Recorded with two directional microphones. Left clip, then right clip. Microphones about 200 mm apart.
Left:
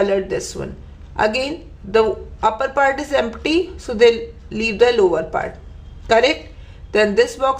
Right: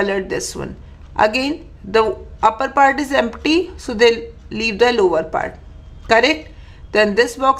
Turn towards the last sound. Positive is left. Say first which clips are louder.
# right 1 dB
turn(degrees=-15)  # may be behind; listen again after turning